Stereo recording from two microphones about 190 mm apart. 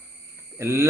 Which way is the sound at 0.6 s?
15° right (ahead or behind).